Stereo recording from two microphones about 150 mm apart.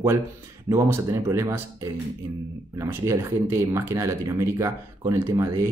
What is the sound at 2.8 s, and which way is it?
Speech, 20° right (ahead or behind).